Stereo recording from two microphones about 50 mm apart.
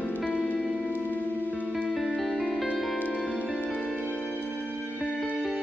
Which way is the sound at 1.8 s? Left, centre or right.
Centre.